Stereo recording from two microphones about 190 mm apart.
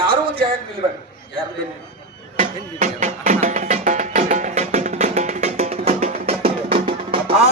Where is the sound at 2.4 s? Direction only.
40° right (ahead or behind).